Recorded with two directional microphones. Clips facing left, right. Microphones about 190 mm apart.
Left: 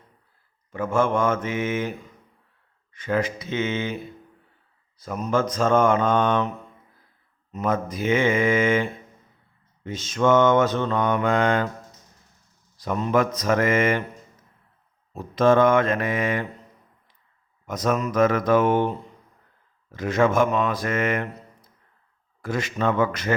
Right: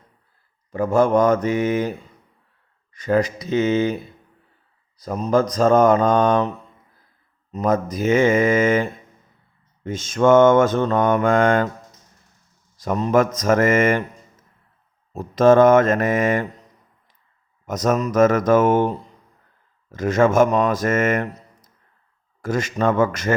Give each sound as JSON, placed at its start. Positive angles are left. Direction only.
{"t": 0.7, "sound": "mantra", "side_deg": -40}
{"t": 7.5, "sound": "mantra", "side_deg": -40}
{"t": 12.8, "sound": "mantra", "side_deg": -40}
{"t": 15.1, "sound": "mantra", "side_deg": -40}
{"t": 17.7, "sound": "mantra", "side_deg": -45}
{"t": 19.9, "sound": "mantra", "side_deg": -45}